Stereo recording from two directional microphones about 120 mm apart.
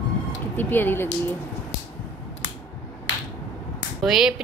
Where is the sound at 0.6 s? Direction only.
15° left (ahead or behind).